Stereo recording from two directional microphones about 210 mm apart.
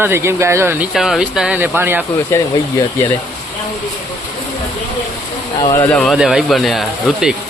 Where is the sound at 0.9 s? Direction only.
Centre (ahead or behind).